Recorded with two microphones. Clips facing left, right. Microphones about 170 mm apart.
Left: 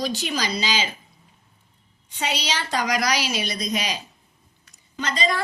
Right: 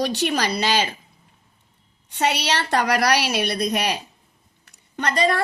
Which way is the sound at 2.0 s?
65° right (ahead or behind).